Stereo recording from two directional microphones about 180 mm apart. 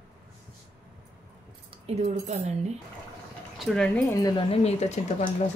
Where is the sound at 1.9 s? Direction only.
35° right (ahead or behind).